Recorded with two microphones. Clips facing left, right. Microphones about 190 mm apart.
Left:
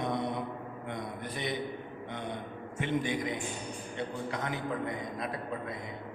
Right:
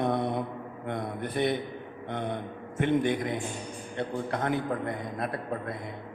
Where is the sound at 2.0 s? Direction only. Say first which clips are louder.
Right 7 dB; 55° right (ahead or behind).